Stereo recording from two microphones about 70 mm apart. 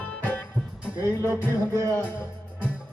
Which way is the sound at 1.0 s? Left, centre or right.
Right.